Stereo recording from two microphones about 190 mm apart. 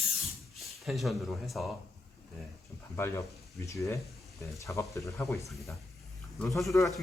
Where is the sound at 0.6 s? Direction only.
Centre (ahead or behind).